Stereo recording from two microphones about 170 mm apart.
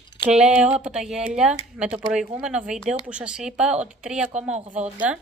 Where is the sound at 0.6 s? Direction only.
5° right (ahead or behind).